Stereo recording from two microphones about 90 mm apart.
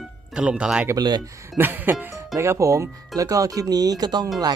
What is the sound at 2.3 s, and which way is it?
Speech, 35° right (ahead or behind).